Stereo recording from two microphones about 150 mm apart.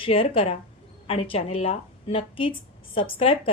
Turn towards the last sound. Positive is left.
turn(degrees=35)  # may be behind; listen again after turning